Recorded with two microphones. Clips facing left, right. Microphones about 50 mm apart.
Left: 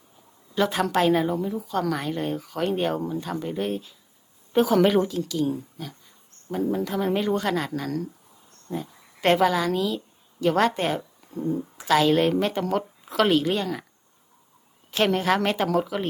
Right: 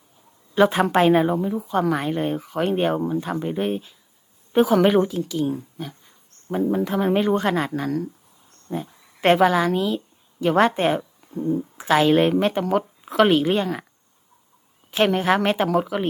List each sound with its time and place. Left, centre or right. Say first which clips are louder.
0.5 s a woman's voice: right 5 dB; right
11.2 s a sound: right 4 dB; centre
11.8 s a woman's voice: right 2 dB; right
14.8 s a woman's voice: right 3 dB; centre